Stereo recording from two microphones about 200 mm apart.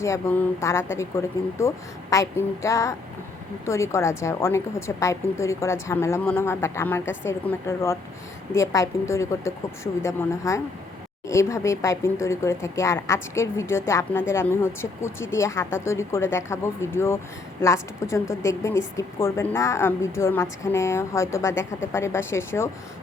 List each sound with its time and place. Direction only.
0.0 s speech: 15° left (ahead or behind)